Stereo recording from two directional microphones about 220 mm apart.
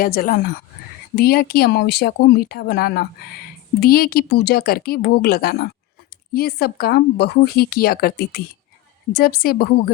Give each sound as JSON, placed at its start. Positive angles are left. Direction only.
{"t": 0.0, "sound": "speech", "side_deg": 40}